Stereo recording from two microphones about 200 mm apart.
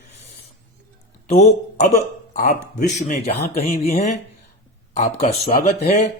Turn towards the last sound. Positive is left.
turn(degrees=35)  # may be behind; listen again after turning